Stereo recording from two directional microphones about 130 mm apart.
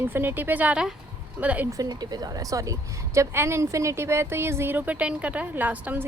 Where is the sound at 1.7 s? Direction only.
30° right (ahead or behind).